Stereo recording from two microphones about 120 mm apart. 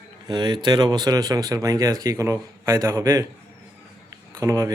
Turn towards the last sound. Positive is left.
turn(degrees=-25)  # may be behind; listen again after turning